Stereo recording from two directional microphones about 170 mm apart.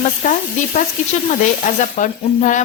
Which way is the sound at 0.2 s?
50° left (ahead or behind).